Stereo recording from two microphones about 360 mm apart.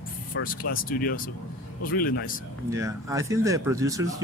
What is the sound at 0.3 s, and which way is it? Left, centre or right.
Speech, left.